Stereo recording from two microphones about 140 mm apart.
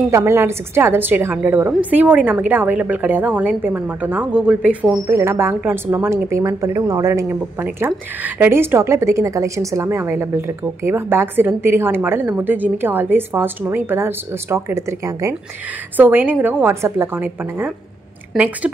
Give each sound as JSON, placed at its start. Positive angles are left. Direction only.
{"t": 0.1, "sound": "a woman's voice", "side_deg": -20}
{"t": 5.0, "sound": "a woman's voice", "side_deg": -20}